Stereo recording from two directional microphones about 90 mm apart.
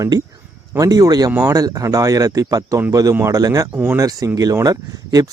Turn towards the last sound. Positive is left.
turn(degrees=-45)  # may be behind; listen again after turning